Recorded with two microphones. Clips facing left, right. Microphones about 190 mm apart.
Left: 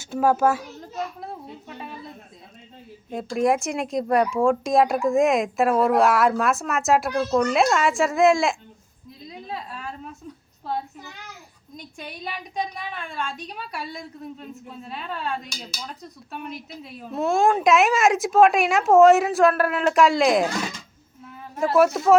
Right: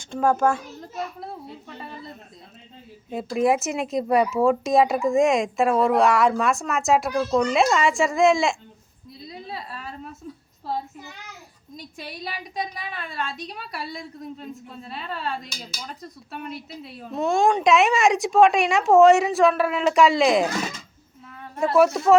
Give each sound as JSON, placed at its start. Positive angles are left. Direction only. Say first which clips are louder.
{"t": 0.0, "sound": "a child's voice", "louder": "left 1 dB", "side_deg": 5}
{"t": 3.1, "sound": "speech", "louder": "even", "side_deg": -5}
{"t": 9.3, "sound": "a sound", "louder": "left 1 dB", "side_deg": -5}
{"t": 11.8, "sound": "speech", "louder": "even", "side_deg": 0}